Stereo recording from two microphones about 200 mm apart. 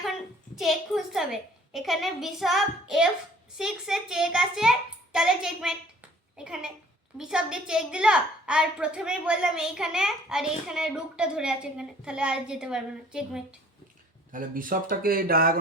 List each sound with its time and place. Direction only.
0.5 s a woman's voice: centre (ahead or behind)
14.3 s speech: 45° right (ahead or behind)